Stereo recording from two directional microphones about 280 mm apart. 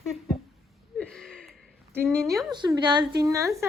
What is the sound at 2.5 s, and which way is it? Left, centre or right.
A woman's voice, centre.